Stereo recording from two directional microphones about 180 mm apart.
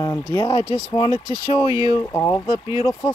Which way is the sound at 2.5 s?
15° right (ahead or behind).